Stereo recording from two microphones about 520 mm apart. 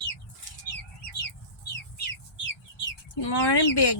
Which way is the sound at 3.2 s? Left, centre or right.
Left.